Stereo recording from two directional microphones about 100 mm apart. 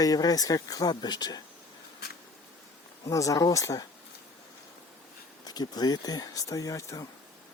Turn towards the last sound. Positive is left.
turn(degrees=35)  # may be behind; listen again after turning